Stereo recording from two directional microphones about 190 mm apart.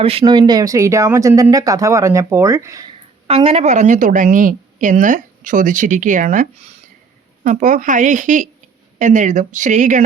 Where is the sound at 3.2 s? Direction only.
30° right (ahead or behind).